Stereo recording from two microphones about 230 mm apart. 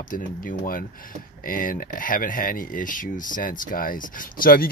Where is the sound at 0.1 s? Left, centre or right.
Left.